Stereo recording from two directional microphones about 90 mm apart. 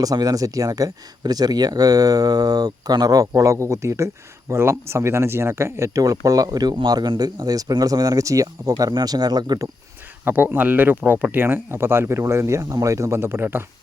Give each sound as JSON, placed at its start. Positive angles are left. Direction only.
{"t": 0.0, "sound": "speech", "side_deg": -45}
{"t": 8.9, "sound": "speech", "side_deg": -55}
{"t": 10.2, "sound": "speech", "side_deg": -20}